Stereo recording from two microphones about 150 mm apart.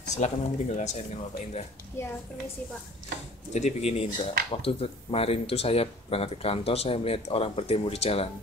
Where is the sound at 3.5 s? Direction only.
45° left (ahead or behind).